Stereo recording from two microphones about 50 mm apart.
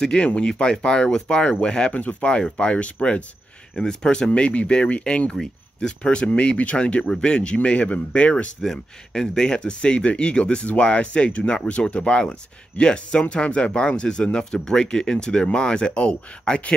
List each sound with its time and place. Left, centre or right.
0.0 s speech: centre
4.3 s speech: left
8.6 s speech: centre